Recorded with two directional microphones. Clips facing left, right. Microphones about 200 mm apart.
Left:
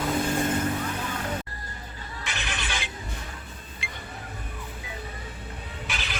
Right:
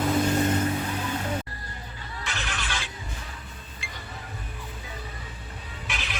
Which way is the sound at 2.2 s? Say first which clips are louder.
Even; 15° left (ahead or behind).